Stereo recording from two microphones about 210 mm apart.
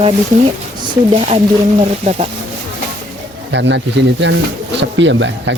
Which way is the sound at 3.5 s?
55° right (ahead or behind).